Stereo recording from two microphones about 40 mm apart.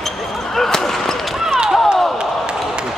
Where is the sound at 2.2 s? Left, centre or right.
Right.